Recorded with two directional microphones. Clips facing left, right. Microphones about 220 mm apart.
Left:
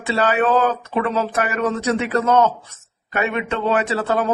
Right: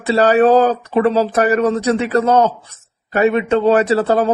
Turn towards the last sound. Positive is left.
turn(degrees=-35)  # may be behind; listen again after turning